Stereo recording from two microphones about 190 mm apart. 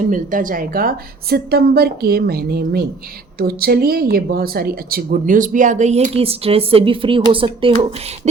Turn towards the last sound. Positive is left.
turn(degrees=-30)  # may be behind; listen again after turning